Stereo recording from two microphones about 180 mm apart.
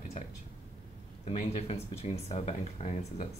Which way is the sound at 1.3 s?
35° left (ahead or behind).